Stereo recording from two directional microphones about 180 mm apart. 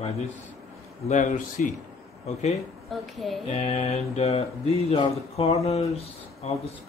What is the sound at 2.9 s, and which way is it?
Speech, centre (ahead or behind).